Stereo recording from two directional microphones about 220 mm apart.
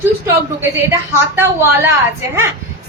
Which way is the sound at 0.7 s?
10° right (ahead or behind).